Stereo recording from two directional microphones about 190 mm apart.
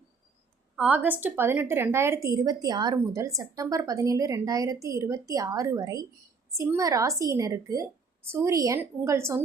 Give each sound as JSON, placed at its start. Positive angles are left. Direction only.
{"t": 0.8, "sound": "a woman's voice", "side_deg": -10}